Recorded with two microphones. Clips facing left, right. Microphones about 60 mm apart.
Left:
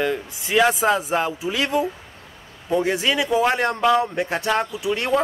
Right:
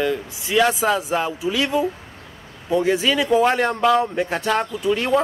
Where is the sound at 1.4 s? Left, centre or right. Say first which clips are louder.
Right 2 dB; left.